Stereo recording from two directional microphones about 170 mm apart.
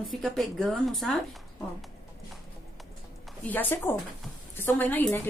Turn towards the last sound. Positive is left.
turn(degrees=10)  # may be behind; listen again after turning